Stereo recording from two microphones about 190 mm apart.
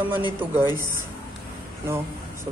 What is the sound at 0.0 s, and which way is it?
Speech, 10° right (ahead or behind).